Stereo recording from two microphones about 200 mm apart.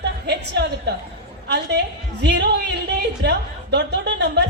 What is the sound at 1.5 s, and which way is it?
A man's voice, 55° right (ahead or behind).